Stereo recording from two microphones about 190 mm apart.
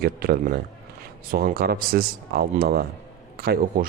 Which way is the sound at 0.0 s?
50° right (ahead or behind).